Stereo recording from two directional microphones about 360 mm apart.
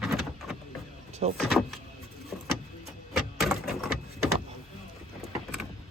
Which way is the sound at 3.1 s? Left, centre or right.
Centre.